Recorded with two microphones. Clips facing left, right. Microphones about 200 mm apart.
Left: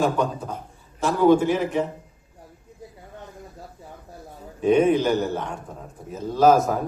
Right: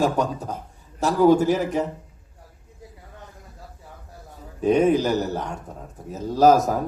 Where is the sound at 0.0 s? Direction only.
40° right (ahead or behind).